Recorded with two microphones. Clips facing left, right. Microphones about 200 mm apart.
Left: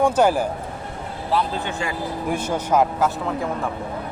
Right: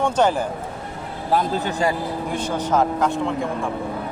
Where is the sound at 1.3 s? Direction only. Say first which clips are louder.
Right 2 dB; 40° right (ahead or behind).